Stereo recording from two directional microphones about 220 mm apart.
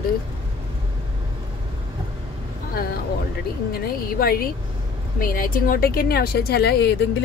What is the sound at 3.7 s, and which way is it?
Speech, 45° left (ahead or behind).